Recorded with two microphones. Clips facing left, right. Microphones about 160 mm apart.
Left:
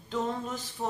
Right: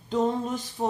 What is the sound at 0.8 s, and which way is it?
Speech, 30° right (ahead or behind).